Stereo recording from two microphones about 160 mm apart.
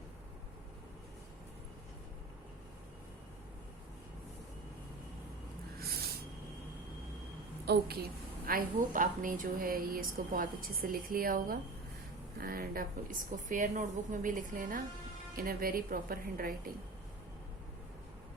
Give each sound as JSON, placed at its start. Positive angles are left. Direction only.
{"t": 5.8, "sound": "snort", "side_deg": -80}
{"t": 7.6, "sound": "a woman's voice", "side_deg": -85}